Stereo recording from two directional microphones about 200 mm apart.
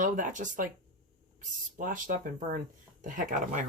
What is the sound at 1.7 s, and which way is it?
Speech, 40° right (ahead or behind).